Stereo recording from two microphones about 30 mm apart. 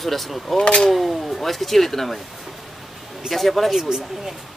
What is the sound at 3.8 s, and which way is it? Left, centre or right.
Speech, centre.